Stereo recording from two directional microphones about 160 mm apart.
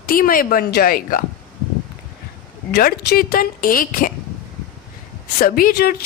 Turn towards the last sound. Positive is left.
turn(degrees=70)  # may be behind; listen again after turning